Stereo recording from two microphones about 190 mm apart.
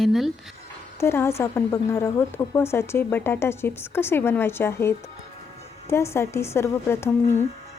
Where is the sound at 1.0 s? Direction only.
15° left (ahead or behind).